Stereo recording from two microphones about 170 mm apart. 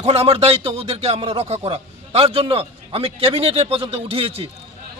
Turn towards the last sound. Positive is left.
turn(degrees=-35)  # may be behind; listen again after turning